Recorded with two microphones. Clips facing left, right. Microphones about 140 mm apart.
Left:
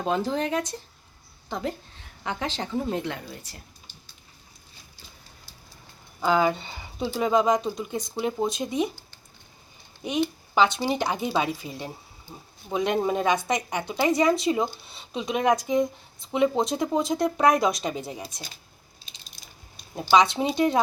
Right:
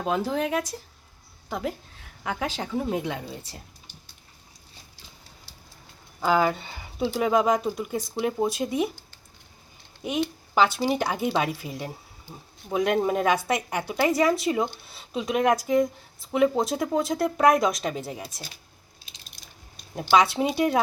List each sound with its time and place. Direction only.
0.0 s speech: 5° right (ahead or behind)
3.2 s speech: 25° right (ahead or behind)
6.2 s speech: 5° right (ahead or behind)
10.0 s speech: 5° right (ahead or behind)
20.1 s speech: 5° right (ahead or behind)